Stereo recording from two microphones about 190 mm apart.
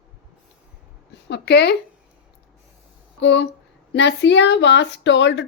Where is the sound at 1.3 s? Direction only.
60° left (ahead or behind).